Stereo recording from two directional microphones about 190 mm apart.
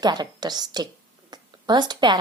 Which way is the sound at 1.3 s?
20° right (ahead or behind).